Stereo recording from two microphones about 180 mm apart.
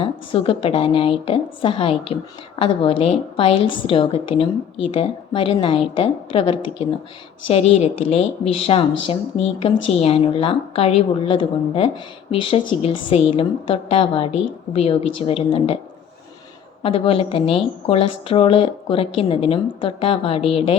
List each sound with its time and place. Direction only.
0.0 s a woman's voice: 30° left (ahead or behind)
16.8 s a woman's voice: 30° left (ahead or behind)